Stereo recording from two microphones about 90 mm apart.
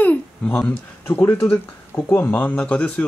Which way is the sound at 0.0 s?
15° left (ahead or behind).